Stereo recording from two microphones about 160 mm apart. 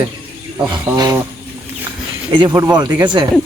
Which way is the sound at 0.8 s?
20° right (ahead or behind).